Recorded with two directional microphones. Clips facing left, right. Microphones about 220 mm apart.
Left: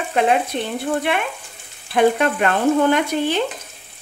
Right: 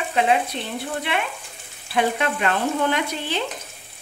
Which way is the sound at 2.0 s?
50° left (ahead or behind).